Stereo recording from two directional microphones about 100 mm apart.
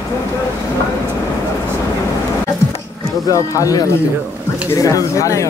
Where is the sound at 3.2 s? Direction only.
35° left (ahead or behind).